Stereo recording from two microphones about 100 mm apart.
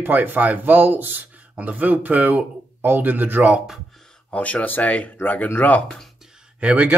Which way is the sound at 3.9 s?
5° left (ahead or behind).